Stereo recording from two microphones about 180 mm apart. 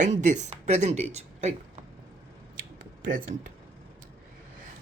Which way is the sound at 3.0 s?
50° right (ahead or behind).